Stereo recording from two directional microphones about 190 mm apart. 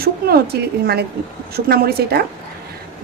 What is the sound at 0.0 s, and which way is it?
A woman's voice, 55° right (ahead or behind).